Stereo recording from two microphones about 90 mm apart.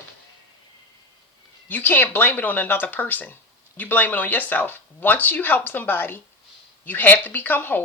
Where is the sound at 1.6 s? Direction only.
20° left (ahead or behind).